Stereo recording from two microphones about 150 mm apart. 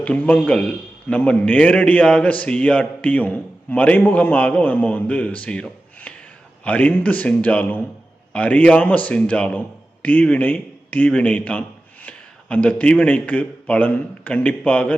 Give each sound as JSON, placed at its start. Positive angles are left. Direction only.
{"t": 0.0, "sound": "a man's voice", "side_deg": 10}